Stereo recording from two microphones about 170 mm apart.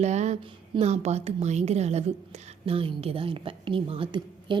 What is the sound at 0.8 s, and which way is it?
A woman's voice, 40° right (ahead or behind).